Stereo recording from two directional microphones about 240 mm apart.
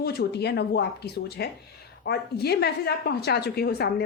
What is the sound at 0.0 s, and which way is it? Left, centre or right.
A woman's voice, left.